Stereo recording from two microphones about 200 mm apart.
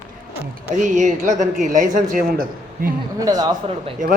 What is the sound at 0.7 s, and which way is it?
A woman's voice, 40° right (ahead or behind).